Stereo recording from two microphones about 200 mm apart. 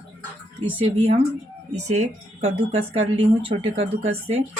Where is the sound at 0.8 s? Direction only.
30° right (ahead or behind).